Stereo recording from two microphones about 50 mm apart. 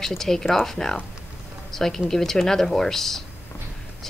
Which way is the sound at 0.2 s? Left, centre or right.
Centre.